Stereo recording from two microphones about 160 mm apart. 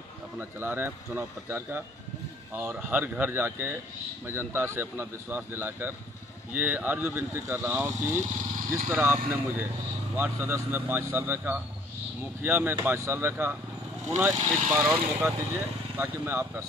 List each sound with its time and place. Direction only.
0.4 s speech: 15° right (ahead or behind)
14.3 s speech: 45° right (ahead or behind)
14.7 s speech: 10° right (ahead or behind)